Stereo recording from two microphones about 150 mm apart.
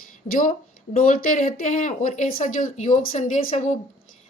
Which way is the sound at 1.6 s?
55° left (ahead or behind).